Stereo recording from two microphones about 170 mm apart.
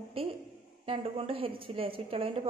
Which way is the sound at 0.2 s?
35° right (ahead or behind).